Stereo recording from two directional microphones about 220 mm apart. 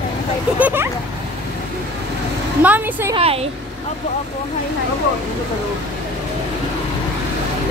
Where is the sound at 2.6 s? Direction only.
10° right (ahead or behind).